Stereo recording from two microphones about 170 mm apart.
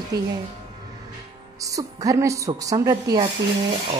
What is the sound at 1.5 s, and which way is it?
Speech, 20° right (ahead or behind).